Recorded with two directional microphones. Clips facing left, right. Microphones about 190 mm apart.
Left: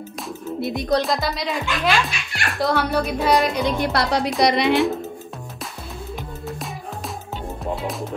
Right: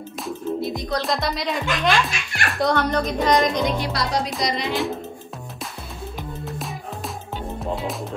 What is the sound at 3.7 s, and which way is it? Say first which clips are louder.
Speech: left 3 dB; 55° left (ahead or behind).